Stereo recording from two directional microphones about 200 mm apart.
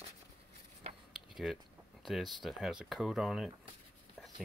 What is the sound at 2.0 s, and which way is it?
Speech, centre (ahead or behind).